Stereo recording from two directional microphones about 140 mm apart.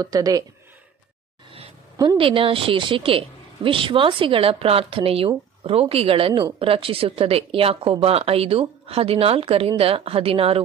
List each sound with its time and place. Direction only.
0.0 s speech: 25° right (ahead or behind)
2.0 s a woman's voice: 35° right (ahead or behind)